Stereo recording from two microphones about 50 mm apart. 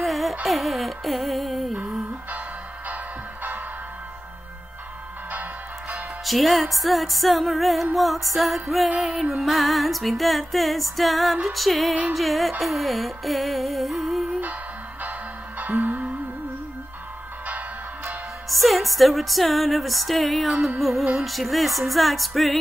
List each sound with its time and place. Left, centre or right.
0.0 s music: centre
5.3 s music: right
6.2 s music: centre
15.6 s music: right
17.5 s music: right
18.5 s music: centre